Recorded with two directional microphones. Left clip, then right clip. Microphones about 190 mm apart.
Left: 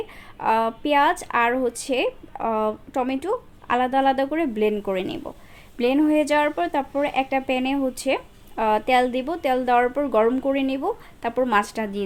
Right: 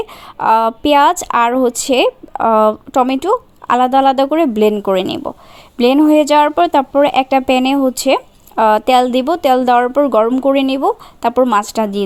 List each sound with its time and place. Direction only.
0.3 s speech: 40° right (ahead or behind)